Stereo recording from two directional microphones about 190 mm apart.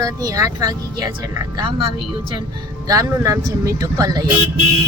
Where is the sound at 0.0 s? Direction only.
20° right (ahead or behind).